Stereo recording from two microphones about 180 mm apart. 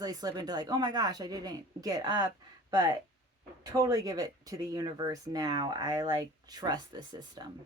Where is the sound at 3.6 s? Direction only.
20° right (ahead or behind).